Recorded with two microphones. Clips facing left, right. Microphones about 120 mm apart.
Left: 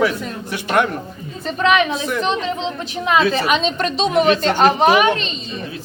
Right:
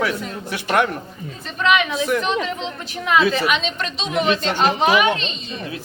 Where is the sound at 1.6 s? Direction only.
35° left (ahead or behind).